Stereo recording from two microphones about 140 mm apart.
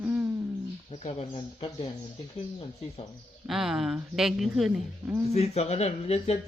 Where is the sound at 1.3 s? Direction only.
35° left (ahead or behind).